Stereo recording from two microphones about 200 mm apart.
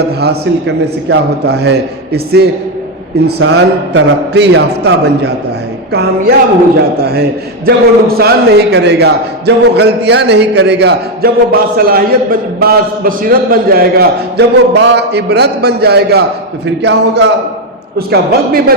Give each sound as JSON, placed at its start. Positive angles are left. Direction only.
{"t": 0.0, "sound": "a man's voice", "side_deg": -55}